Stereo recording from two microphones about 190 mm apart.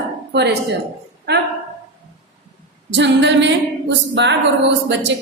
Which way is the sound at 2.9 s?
70° right (ahead or behind).